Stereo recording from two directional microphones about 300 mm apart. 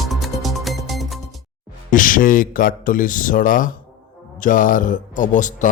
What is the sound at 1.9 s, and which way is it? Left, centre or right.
Speech, left.